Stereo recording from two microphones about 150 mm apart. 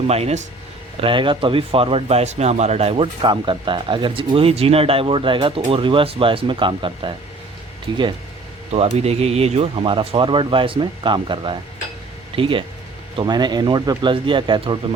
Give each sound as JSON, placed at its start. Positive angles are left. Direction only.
{"t": 0.1, "sound": "speech", "side_deg": -45}
{"t": 1.0, "sound": "speech", "side_deg": -35}
{"t": 8.7, "sound": "speech", "side_deg": -45}